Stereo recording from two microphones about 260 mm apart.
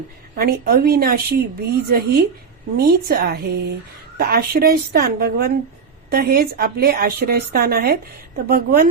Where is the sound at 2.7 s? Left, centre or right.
Right.